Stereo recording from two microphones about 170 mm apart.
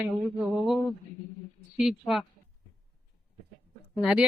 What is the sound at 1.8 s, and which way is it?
Speech, centre (ahead or behind).